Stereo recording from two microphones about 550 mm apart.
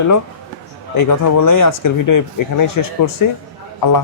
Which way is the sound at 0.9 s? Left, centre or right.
Left.